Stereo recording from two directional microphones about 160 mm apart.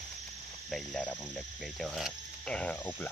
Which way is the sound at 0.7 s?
Centre (ahead or behind).